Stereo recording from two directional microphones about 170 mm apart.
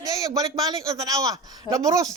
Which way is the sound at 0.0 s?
20° right (ahead or behind).